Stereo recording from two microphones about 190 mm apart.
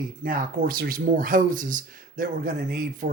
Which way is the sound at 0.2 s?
45° right (ahead or behind).